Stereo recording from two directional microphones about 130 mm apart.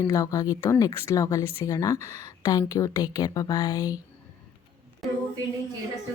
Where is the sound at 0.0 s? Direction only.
25° left (ahead or behind).